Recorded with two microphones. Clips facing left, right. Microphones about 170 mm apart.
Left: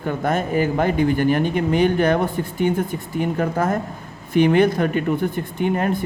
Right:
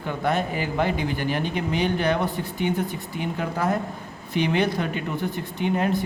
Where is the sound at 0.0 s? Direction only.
45° left (ahead or behind).